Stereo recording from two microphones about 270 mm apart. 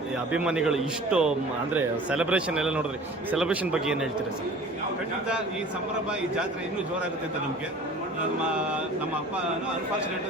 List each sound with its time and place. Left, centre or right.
0.3 s speech: centre